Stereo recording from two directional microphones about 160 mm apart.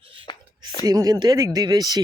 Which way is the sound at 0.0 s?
30° right (ahead or behind).